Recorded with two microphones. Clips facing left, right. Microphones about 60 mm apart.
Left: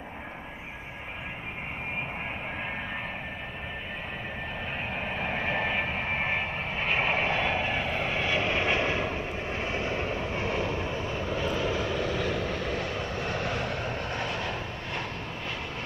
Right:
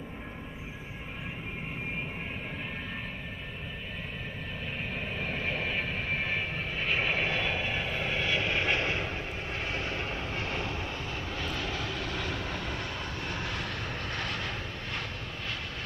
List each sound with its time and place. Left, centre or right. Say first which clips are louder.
5.2 s vehicle: left 4 dB; left
8.1 s vehicle: left 1 dB; centre
11.3 s vehicle: left 7 dB; centre
13.6 s vehicle: left 4 dB; left